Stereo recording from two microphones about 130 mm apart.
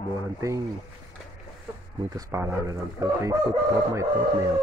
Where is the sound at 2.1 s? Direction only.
25° right (ahead or behind).